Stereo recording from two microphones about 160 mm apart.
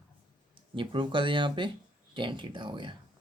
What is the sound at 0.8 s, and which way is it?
Speech, 30° right (ahead or behind).